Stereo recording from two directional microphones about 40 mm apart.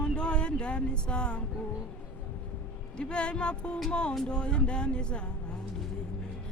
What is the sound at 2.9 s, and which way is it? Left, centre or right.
Music, left.